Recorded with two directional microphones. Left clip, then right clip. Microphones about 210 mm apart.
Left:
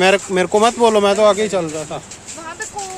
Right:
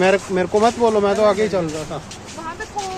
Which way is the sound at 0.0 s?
40° left (ahead or behind).